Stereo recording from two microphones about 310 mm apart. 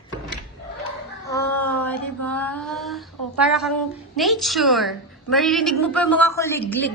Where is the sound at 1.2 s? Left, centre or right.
Centre.